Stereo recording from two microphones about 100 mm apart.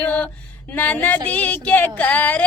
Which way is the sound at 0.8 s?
15° left (ahead or behind).